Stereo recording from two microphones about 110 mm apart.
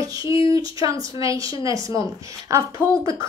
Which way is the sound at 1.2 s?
30° right (ahead or behind).